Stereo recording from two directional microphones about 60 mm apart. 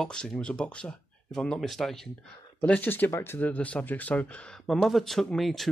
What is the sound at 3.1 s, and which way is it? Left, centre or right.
Speech, left.